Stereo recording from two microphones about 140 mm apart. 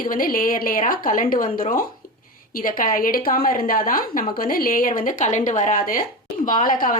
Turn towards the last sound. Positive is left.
turn(degrees=85)